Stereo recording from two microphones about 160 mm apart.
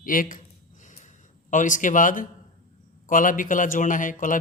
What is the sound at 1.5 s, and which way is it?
Speech, 55° left (ahead or behind).